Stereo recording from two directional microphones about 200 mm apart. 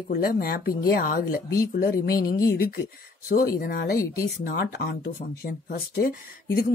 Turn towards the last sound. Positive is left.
turn(degrees=45)  # may be behind; listen again after turning